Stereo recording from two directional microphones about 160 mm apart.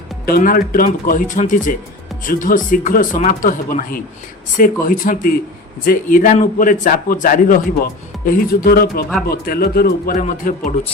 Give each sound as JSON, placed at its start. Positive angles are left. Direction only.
{"t": 0.3, "sound": "a man's voice", "side_deg": 65}